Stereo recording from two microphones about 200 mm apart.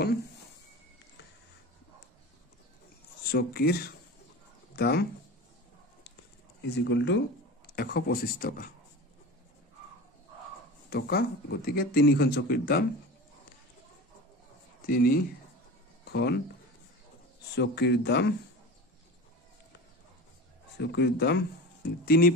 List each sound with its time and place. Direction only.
3.3 s speech: 50° left (ahead or behind)
6.8 s speech: 65° left (ahead or behind)
7.7 s speech: 45° left (ahead or behind)
10.9 s speech: 50° left (ahead or behind)
14.9 s speech: 50° left (ahead or behind)
17.6 s speech: 60° left (ahead or behind)
20.8 s speech: 60° left (ahead or behind)